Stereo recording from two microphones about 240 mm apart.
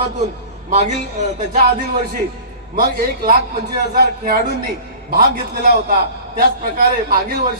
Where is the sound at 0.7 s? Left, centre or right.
Right.